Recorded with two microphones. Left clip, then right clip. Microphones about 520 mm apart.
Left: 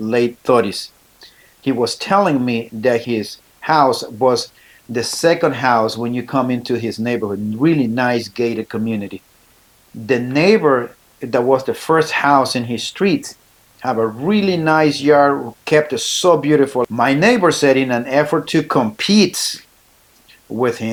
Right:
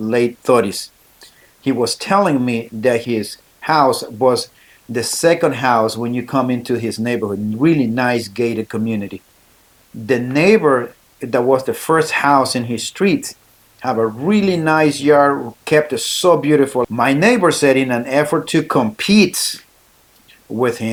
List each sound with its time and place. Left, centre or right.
0.0 s speech: right